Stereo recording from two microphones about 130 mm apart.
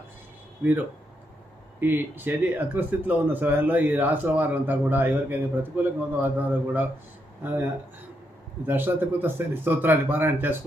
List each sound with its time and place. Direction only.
1.8 s speech: 15° right (ahead or behind)